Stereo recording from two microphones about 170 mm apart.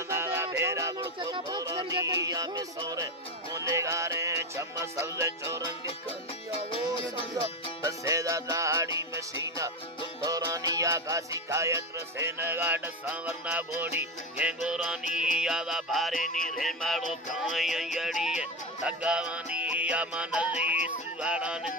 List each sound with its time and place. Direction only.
0.1 s music: 15° right (ahead or behind)
6.7 s music: 30° left (ahead or behind)
7.3 s music: 20° right (ahead or behind); by 16.1 s centre (ahead or behind)
16.2 s music: 55° left (ahead or behind)
16.6 s music: centre (ahead or behind)